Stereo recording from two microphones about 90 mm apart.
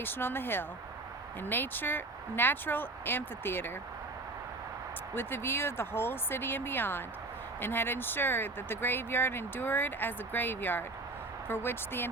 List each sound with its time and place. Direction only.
0.0 s speech: 25° left (ahead or behind)
5.1 s speech: 25° left (ahead or behind)